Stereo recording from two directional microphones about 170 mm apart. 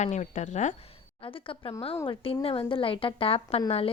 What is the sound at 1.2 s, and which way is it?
A woman's voice, 30° left (ahead or behind).